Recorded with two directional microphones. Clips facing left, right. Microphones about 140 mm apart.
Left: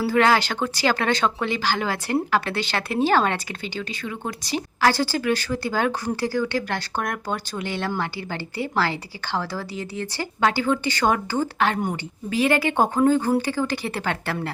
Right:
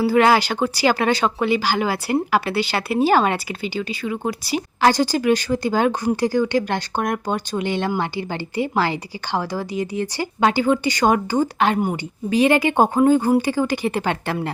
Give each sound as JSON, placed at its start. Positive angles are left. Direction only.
{"t": 0.0, "sound": "a woman's voice", "side_deg": -10}